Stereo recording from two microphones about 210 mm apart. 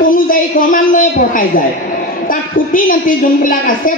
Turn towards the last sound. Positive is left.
turn(degrees=40)  # may be behind; listen again after turning